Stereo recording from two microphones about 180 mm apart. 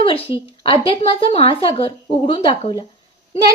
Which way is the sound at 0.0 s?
30° left (ahead or behind).